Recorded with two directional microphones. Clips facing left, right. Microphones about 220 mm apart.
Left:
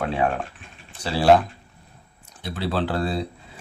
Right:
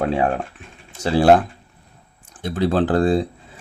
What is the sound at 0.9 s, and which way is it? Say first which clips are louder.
Speech: right 3 dB; 50° right (ahead or behind).